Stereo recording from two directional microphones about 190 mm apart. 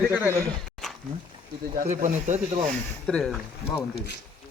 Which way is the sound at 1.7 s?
45° right (ahead or behind).